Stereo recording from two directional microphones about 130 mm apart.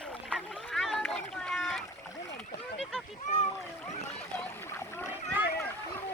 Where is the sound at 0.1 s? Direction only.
5° left (ahead or behind).